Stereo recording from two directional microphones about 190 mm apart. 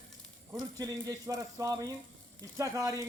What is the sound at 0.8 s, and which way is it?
Speech, 20° right (ahead or behind).